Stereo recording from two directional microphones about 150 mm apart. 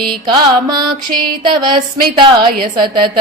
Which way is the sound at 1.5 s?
30° right (ahead or behind).